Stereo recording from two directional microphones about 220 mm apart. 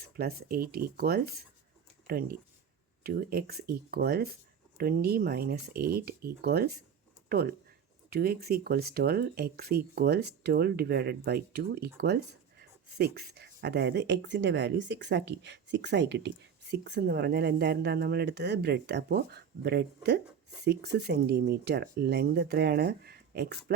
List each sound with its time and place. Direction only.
0.2 s speech: 45° right (ahead or behind)